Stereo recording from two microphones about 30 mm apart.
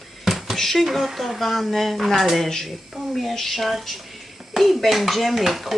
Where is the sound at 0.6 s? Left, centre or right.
Centre.